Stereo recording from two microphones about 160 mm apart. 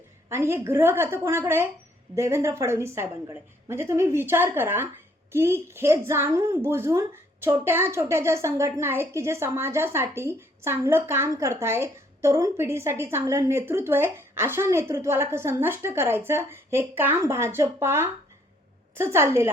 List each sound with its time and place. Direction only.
0.3 s a woman's voice: 15° right (ahead or behind)